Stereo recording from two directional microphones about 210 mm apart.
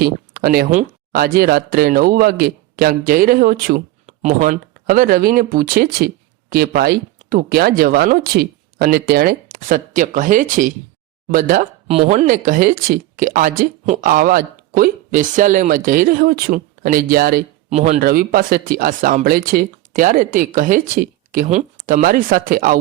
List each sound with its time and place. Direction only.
0.0 s speech: 45° right (ahead or behind)
4.0 s speech: 30° right (ahead or behind)
17.7 s speech: 30° right (ahead or behind)
18.0 s speech: 45° right (ahead or behind)